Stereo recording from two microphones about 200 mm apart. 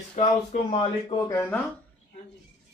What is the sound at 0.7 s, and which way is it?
Speech, 25° left (ahead or behind).